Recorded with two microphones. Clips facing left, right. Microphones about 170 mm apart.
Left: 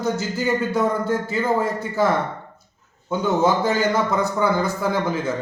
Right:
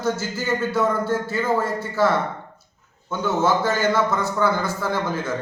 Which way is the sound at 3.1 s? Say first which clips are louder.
Left 2 dB; 15° left (ahead or behind).